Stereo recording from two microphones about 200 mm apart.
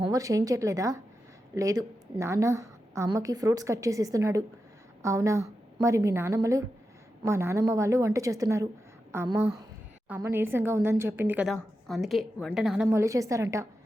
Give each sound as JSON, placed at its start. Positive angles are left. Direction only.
{"t": 0.0, "sound": "a woman's voice", "side_deg": -15}
{"t": 12.9, "sound": "a woman's voice", "side_deg": -15}